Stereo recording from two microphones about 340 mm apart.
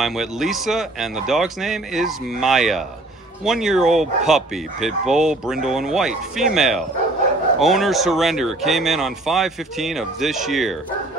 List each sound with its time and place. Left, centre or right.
0.0 s speech: centre